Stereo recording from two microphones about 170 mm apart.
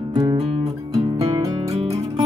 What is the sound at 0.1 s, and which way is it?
Music, 30° right (ahead or behind).